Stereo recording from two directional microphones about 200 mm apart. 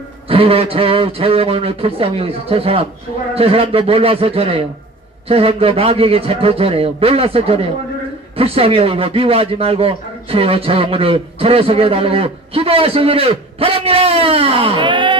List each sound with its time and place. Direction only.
0.3 s a man's voice: 30° right (ahead or behind)